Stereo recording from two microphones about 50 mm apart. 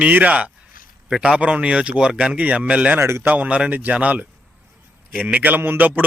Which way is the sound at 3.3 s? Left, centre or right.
Right.